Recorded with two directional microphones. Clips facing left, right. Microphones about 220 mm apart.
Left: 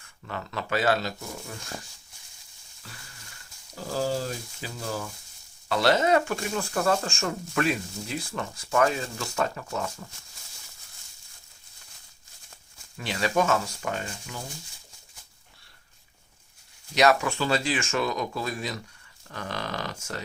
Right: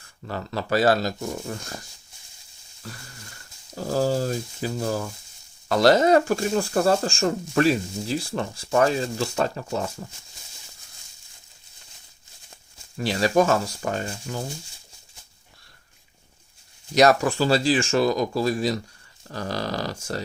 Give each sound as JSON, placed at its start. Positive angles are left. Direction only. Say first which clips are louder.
{"t": 0.3, "sound": "speech", "louder": "right 5 dB", "side_deg": -35}
{"t": 3.8, "sound": "speech", "louder": "right 5 dB", "side_deg": -40}
{"t": 13.0, "sound": "speech", "louder": "right 6 dB", "side_deg": -35}
{"t": 16.9, "sound": "speech", "louder": "right 4 dB", "side_deg": -40}